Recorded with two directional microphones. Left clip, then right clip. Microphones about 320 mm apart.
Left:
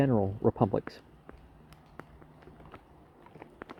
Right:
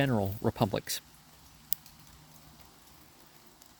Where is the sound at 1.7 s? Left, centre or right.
Centre.